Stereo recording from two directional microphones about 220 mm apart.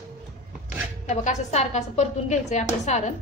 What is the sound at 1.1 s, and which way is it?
A woman's voice, 30° left (ahead or behind).